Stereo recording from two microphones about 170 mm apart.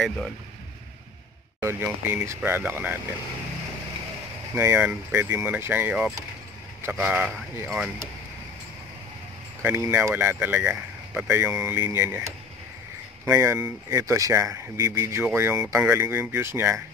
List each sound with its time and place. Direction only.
1.6 s speech: 15° right (ahead or behind)
4.6 s speech: 10° right (ahead or behind)
9.6 s speech: 15° right (ahead or behind)